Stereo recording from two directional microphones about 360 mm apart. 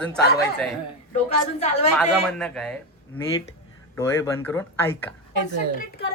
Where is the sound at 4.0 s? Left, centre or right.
Centre.